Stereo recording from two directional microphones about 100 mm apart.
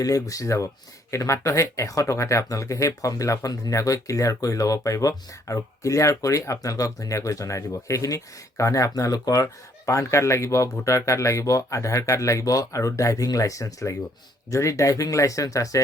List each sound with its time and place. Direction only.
0.0 s speech: 35° left (ahead or behind)